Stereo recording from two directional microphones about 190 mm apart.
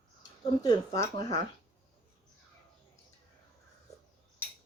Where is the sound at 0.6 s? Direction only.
20° left (ahead or behind).